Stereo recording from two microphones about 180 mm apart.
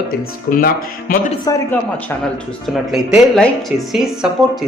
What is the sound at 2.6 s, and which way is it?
Speech, centre (ahead or behind).